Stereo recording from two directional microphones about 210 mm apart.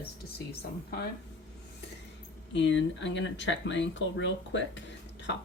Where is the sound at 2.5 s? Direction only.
60° left (ahead or behind).